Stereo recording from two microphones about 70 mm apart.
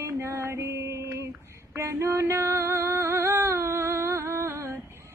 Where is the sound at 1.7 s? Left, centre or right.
Right.